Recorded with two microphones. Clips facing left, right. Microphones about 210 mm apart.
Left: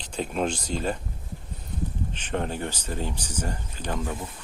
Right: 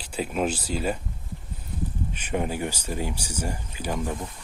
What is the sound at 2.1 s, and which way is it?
Speech, 10° right (ahead or behind).